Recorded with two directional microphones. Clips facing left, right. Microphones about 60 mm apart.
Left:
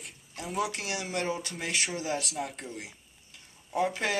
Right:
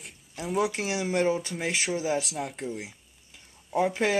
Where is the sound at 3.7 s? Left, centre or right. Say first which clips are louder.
Right 4 dB; centre.